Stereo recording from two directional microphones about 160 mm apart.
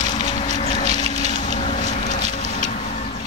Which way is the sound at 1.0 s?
50° left (ahead or behind).